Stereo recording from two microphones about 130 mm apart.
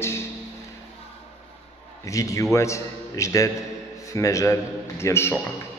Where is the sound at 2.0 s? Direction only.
25° left (ahead or behind).